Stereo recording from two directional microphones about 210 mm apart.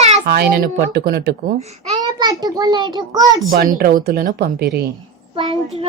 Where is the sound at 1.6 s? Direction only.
30° right (ahead or behind).